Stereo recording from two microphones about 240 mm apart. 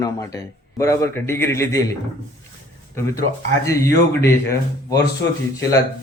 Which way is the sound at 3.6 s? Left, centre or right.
Centre.